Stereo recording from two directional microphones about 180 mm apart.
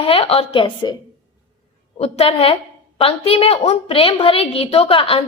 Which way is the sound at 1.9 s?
35° left (ahead or behind).